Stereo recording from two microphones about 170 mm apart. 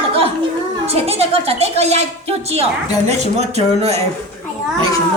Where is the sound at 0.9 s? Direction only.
35° right (ahead or behind).